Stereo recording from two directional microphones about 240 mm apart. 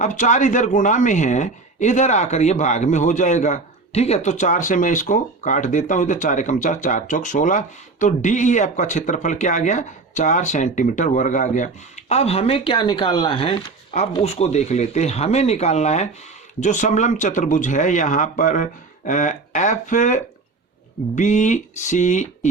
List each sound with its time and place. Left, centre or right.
0.0 s speech: left